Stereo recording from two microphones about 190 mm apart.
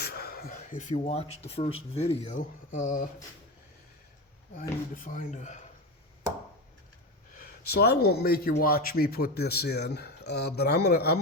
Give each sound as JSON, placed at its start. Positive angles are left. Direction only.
{"t": 0.0, "sound": "a sound", "side_deg": 55}
{"t": 1.5, "sound": "speech", "side_deg": 30}
{"t": 4.9, "sound": "speech", "side_deg": 45}
{"t": 7.3, "sound": "speech", "side_deg": 55}